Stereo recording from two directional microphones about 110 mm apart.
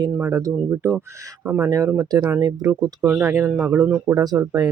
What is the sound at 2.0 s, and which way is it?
Speech, 35° right (ahead or behind).